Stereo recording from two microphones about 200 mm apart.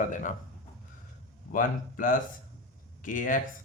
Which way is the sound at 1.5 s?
40° left (ahead or behind).